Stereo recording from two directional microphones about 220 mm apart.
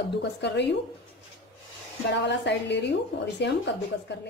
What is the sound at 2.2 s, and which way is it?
A woman's voice, 50° left (ahead or behind).